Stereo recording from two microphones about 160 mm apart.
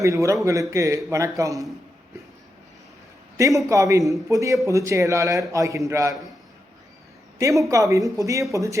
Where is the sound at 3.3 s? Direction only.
20° right (ahead or behind).